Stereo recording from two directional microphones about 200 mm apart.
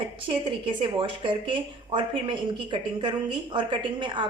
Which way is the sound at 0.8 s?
25° right (ahead or behind).